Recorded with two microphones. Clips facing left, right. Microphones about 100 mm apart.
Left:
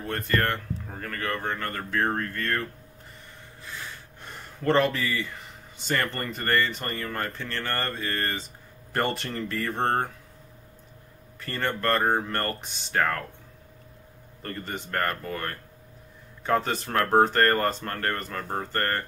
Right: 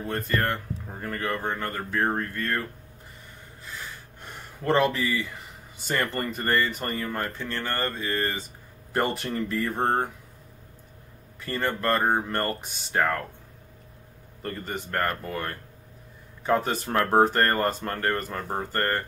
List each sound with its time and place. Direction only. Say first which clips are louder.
0.0 s speech: even; 5° right (ahead or behind)
3.6 s a sound: even; centre (ahead or behind)
5.9 s speech: right 1 dB; 10° right (ahead or behind)
11.4 s speech: right 1 dB; 5° right (ahead or behind)
14.4 s speech: right 2 dB; 5° right (ahead or behind)